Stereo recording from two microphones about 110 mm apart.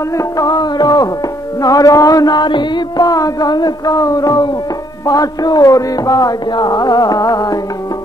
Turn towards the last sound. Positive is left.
turn(degrees=35)  # may be behind; listen again after turning